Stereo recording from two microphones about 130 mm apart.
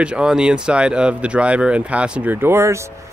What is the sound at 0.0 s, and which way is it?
Speech, 5° right (ahead or behind).